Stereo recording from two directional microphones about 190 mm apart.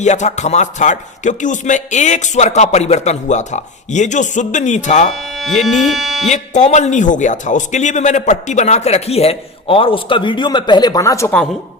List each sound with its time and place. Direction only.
0.0 s speech: 40° left (ahead or behind)
5.1 s speech: centre (ahead or behind)
6.2 s speech: 40° left (ahead or behind); by 11.3 s 15° left (ahead or behind)